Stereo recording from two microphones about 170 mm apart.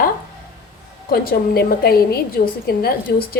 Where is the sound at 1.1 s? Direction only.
60° left (ahead or behind).